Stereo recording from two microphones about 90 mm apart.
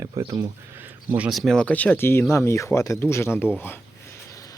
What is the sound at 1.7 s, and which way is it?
Speech, 20° left (ahead or behind).